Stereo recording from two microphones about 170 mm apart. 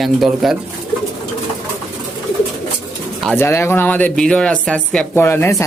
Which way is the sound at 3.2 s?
10° left (ahead or behind).